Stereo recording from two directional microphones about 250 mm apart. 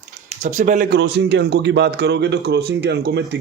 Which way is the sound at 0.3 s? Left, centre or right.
Right.